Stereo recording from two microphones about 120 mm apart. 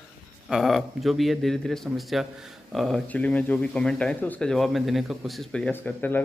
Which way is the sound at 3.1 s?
10° left (ahead or behind).